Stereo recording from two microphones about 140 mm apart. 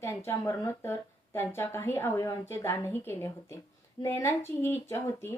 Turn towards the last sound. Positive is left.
turn(degrees=15)  # may be behind; listen again after turning